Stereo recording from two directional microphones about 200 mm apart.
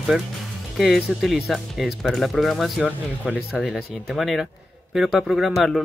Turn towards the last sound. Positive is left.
turn(degrees=0)  # may be behind; listen again after turning